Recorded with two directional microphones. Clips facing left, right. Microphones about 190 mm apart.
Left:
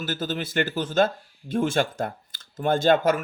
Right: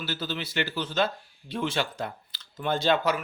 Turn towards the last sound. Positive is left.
turn(degrees=50)  # may be behind; listen again after turning